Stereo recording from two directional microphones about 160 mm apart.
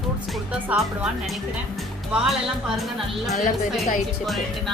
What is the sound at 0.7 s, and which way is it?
Speech, 10° right (ahead or behind).